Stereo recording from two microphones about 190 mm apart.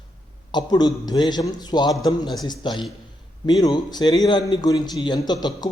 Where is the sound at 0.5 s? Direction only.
20° left (ahead or behind).